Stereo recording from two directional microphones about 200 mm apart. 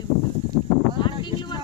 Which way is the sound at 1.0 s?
20° left (ahead or behind).